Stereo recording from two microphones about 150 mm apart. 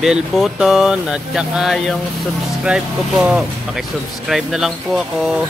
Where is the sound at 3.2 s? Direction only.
5° right (ahead or behind).